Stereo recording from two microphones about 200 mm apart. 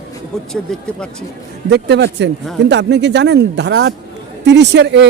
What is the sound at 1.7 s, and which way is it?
Speech, 60° right (ahead or behind).